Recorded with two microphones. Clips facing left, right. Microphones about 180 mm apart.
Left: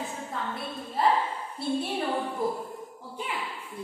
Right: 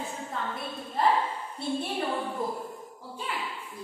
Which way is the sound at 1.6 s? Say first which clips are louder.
Left 2 dB; 5° left (ahead or behind).